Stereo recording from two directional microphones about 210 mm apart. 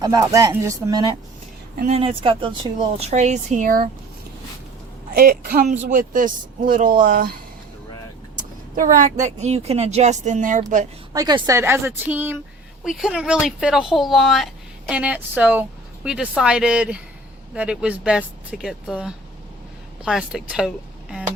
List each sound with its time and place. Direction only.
0.0 s a woman's voice: 15° right (ahead or behind)
1.7 s speech: 40° right (ahead or behind)
2.0 s speech: 25° right (ahead or behind)
3.1 s speech: 35° right (ahead or behind)
5.1 s a woman's voice: 45° right (ahead or behind)
8.4 s speech: 40° right (ahead or behind)
11.1 s a woman's voice: 20° right (ahead or behind); by 20.7 s 5° right (ahead or behind)